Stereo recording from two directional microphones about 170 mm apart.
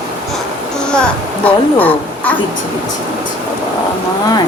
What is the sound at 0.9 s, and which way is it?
A woman's voice, 5° left (ahead or behind).